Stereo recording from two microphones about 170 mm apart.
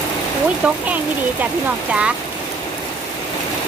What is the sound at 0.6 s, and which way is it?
Speech, 5° right (ahead or behind).